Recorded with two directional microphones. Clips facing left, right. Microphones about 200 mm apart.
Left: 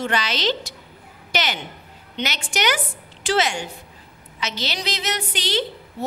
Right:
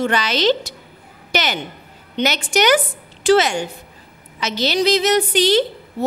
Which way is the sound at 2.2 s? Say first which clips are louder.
Right 7 dB; 45° right (ahead or behind).